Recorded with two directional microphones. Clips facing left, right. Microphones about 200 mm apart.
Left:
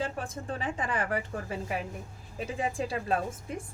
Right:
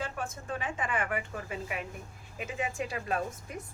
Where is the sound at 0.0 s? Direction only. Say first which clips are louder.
Left 3 dB; 35° left (ahead or behind).